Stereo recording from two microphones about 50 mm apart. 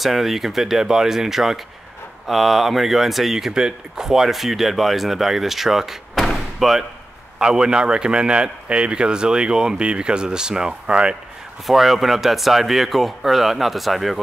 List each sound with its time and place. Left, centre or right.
0.0 s a man's voice: centre
11.6 s speech: centre